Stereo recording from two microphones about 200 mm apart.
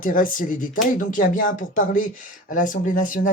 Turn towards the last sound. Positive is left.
turn(degrees=40)  # may be behind; listen again after turning